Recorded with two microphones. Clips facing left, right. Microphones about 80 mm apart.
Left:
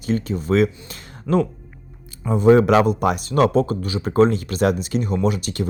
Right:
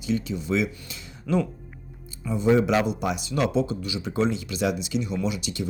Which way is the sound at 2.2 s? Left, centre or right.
Left.